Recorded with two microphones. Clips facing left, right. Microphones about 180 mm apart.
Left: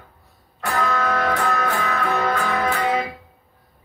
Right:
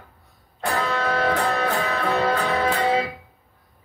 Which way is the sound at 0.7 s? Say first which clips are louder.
Left 2 dB; 30° right (ahead or behind).